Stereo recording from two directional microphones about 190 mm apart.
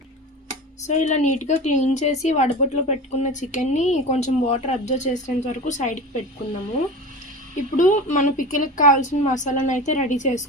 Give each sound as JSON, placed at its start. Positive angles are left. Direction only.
{"t": 0.9, "sound": "a woman's voice", "side_deg": 40}
{"t": 7.5, "sound": "a woman's voice", "side_deg": 40}